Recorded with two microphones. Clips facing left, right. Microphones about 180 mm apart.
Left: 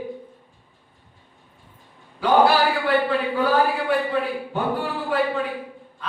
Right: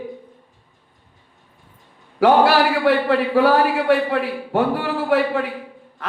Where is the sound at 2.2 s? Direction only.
75° right (ahead or behind).